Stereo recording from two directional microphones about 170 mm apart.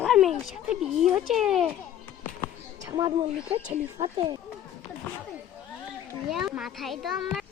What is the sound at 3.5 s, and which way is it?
Speech, 35° right (ahead or behind).